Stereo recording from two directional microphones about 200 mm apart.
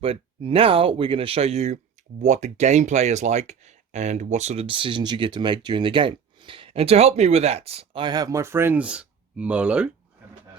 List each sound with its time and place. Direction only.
0.0 s speech: 30° right (ahead or behind); by 9.9 s 5° right (ahead or behind)